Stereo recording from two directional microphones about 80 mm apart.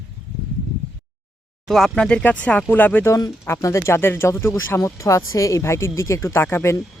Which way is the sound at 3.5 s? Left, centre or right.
Left.